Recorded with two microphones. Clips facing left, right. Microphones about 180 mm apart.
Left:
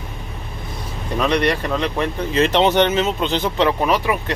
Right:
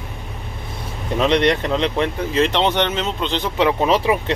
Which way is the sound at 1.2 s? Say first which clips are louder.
Right 2 dB; 25° right (ahead or behind).